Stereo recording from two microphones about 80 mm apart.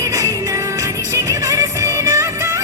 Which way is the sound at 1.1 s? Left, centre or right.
Right.